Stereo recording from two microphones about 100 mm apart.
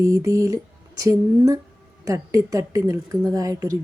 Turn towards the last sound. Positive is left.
turn(degrees=-35)  # may be behind; listen again after turning